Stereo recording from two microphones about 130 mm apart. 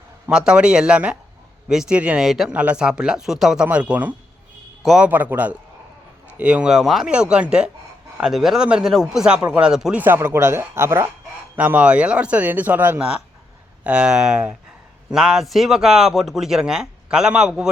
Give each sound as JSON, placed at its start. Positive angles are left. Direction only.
{"t": 0.3, "sound": "a man's voice", "side_deg": -5}
{"t": 5.0, "sound": "a man's voice", "side_deg": -15}
{"t": 10.0, "sound": "a man's voice", "side_deg": -15}